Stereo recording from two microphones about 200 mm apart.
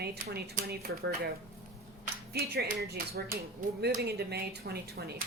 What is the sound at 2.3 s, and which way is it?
Speech, 50° right (ahead or behind).